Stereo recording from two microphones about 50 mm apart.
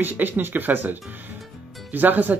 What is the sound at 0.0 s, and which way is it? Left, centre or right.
Speech, right.